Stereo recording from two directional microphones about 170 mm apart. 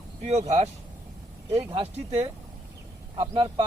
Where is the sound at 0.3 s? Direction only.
40° right (ahead or behind).